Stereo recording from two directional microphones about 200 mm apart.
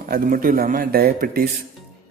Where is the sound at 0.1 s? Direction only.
45° right (ahead or behind).